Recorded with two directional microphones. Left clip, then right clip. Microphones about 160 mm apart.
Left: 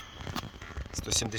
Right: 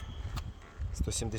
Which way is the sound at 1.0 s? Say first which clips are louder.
Left 7 dB; 20° right (ahead or behind).